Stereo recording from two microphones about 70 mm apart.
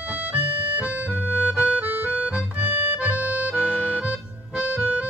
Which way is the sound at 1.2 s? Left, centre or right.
Right.